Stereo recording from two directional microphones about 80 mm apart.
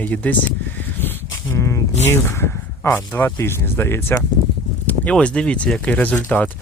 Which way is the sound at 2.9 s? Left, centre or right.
Left.